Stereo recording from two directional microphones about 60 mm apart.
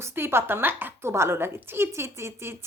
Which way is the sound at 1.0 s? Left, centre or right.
Right.